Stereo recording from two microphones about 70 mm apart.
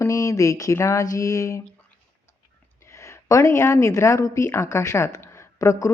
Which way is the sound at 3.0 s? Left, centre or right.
Left.